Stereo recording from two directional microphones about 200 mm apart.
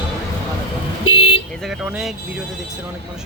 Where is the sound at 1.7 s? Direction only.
Centre (ahead or behind).